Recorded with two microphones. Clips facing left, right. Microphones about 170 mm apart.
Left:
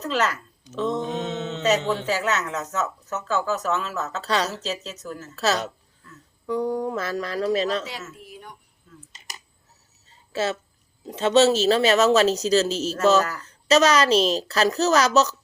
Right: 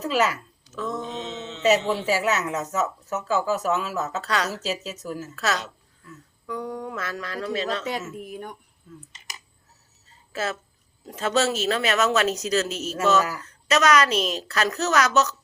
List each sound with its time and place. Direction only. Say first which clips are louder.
0.0 s a sound: right 1 dB; 5° right (ahead or behind)
0.6 s mantra: left 5 dB; 20° left (ahead or behind)
1.0 s mantra: left 5 dB; 55° left (ahead or behind)
1.6 s speech: right 2 dB; 5° right (ahead or behind)
4.2 s speech: left 6 dB; 30° left (ahead or behind)
4.6 s speech: right 1 dB; 5° right (ahead or behind)
6.4 s a woman's voice: left 7 dB; 30° left (ahead or behind)
8.2 s speech: right 7 dB; 50° right (ahead or behind)
8.9 s speech: right 4 dB; 5° right (ahead or behind)
10.3 s a woman's voice: left 4 dB; 25° left (ahead or behind)